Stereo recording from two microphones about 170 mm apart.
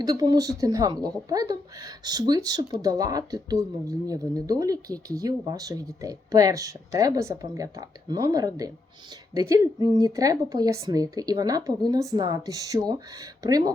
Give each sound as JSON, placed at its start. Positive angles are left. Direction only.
{"t": 0.0, "sound": "speech", "side_deg": -25}